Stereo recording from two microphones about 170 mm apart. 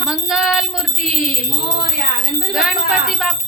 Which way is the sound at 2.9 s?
Centre (ahead or behind).